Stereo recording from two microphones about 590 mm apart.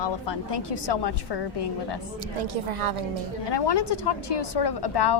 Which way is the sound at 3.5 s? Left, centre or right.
Left.